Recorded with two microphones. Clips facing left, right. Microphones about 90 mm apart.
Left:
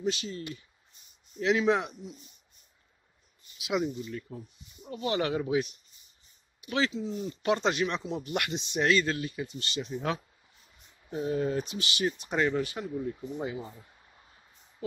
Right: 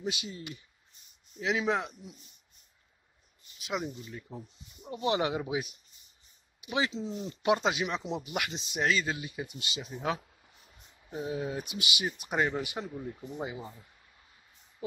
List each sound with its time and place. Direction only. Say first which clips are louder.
0.0 s speech: left 5 dB; 10° right (ahead or behind)
1.4 s speech: left 4 dB; 5° right (ahead or behind)
3.5 s speech: left 5 dB; centre (ahead or behind)
3.8 s speech: left 6 dB; 15° right (ahead or behind)
7.0 s speech: left 2 dB; 20° right (ahead or behind)
7.5 s speech: left 4 dB; 10° right (ahead or behind)
9.1 s speech: left 4 dB; 15° right (ahead or behind)
14.8 s a sound: left 3 dB; 15° right (ahead or behind)